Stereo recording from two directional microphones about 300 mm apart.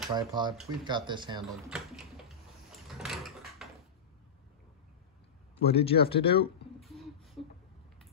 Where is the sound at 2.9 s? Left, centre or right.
Centre.